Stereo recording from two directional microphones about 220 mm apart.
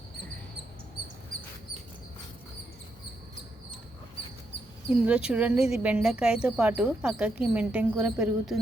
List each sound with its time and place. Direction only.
4.9 s speech: 5° right (ahead or behind)